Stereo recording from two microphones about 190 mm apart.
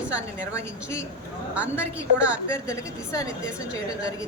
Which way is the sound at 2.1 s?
5° right (ahead or behind).